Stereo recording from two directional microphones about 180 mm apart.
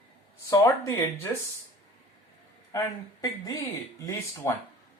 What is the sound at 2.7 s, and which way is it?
Speech, 20° left (ahead or behind).